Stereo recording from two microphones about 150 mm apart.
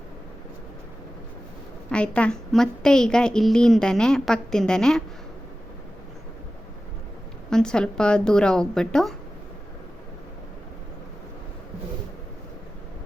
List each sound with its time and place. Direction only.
1.9 s a woman's voice: 5° left (ahead or behind)
7.5 s a woman's voice: 5° left (ahead or behind)